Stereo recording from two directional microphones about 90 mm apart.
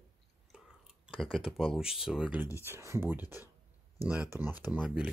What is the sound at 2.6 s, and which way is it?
Speech, 30° right (ahead or behind).